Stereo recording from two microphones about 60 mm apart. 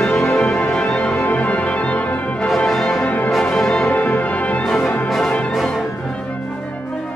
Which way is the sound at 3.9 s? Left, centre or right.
Left.